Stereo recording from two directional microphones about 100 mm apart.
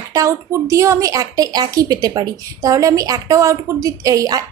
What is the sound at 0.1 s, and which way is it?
A woman's voice, 30° right (ahead or behind).